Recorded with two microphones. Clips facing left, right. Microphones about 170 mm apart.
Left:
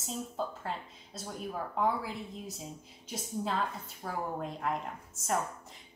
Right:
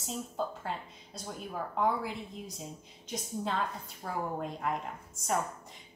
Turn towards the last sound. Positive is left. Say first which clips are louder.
# even
turn(degrees=0)  # may be behind; listen again after turning